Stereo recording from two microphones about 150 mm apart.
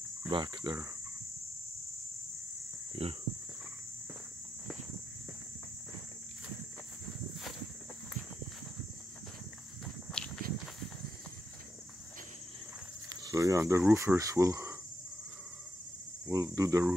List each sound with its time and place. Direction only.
0.3 s cricket: 35° right (ahead or behind)
3.0 s cricket: 40° right (ahead or behind)
10.4 s walk: 75° right (ahead or behind)
13.1 s cricket: 25° right (ahead or behind)
13.9 s speech: 20° right (ahead or behind)
16.3 s cricket: 25° right (ahead or behind)